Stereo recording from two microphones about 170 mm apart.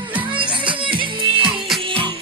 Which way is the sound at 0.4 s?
30° right (ahead or behind).